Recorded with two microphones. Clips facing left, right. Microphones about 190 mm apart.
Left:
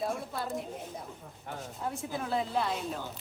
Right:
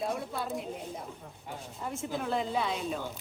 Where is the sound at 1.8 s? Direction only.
Centre (ahead or behind).